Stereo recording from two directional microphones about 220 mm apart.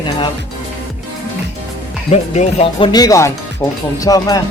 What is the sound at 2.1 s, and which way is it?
Speech, 30° left (ahead or behind).